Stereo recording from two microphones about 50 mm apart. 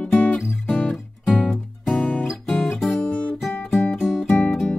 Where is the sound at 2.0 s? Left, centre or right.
Left.